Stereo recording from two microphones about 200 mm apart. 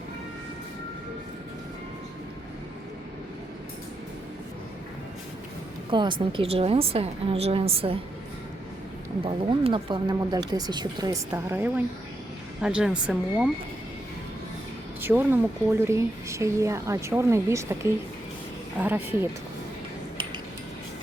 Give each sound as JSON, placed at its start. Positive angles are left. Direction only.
{"t": 5.9, "sound": "speech", "side_deg": -25}
{"t": 9.2, "sound": "speech", "side_deg": -25}
{"t": 15.0, "sound": "speech", "side_deg": -10}
{"t": 18.8, "sound": "speech", "side_deg": -10}